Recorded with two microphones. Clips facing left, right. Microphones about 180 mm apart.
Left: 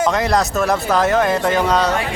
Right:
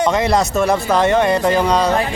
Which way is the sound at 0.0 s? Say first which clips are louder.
Right 1 dB; centre (ahead or behind).